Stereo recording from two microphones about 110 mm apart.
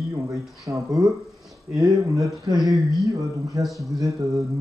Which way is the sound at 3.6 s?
Centre (ahead or behind).